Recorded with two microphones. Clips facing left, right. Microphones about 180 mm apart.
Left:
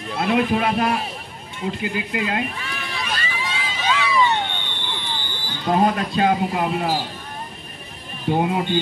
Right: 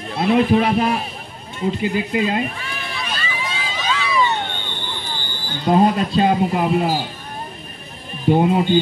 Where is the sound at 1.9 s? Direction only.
25° right (ahead or behind).